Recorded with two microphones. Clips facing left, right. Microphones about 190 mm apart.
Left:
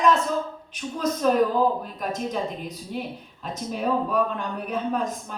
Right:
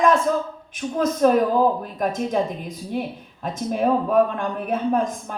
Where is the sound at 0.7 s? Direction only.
50° right (ahead or behind).